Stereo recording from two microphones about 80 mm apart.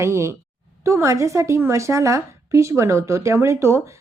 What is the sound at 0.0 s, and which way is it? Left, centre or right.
A woman's voice, right.